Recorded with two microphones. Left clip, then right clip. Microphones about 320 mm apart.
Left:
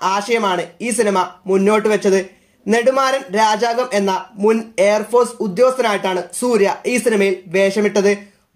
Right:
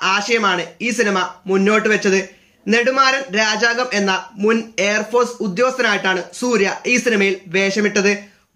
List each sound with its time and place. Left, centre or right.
0.0 s speech: centre